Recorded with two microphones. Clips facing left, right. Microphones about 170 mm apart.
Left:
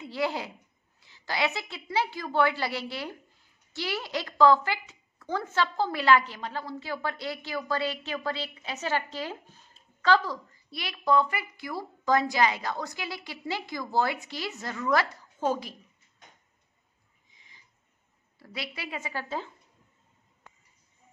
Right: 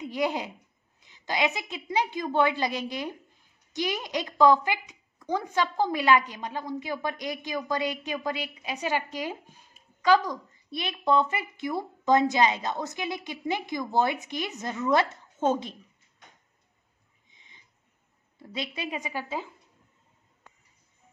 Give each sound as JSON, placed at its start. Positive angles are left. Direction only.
{"t": 0.0, "sound": "a woman's voice", "side_deg": -15}
{"t": 17.3, "sound": "a sound", "side_deg": -20}
{"t": 18.4, "sound": "a woman's voice", "side_deg": -20}